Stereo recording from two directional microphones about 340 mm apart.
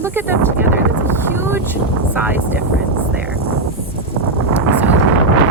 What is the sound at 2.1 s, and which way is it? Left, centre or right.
Speech, centre.